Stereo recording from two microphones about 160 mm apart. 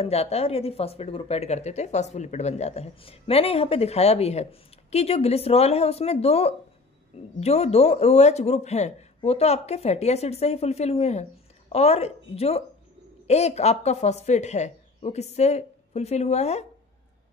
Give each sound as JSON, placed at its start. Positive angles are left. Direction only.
{"t": 0.0, "sound": "speech", "side_deg": 40}